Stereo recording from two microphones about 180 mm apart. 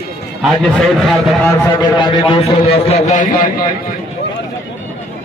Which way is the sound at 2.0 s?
25° left (ahead or behind).